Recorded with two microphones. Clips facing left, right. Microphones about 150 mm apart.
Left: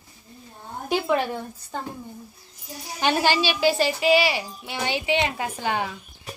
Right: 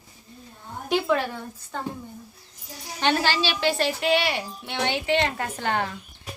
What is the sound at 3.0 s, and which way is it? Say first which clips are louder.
A woman's voice: left 2 dB; 15° left (ahead or behind).